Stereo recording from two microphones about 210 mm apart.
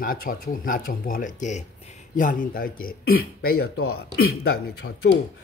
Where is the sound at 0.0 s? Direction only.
45° left (ahead or behind).